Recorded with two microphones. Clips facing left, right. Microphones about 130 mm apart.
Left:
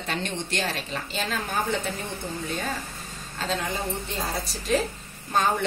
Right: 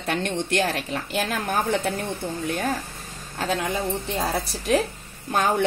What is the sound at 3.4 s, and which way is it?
Speech, 60° right (ahead or behind).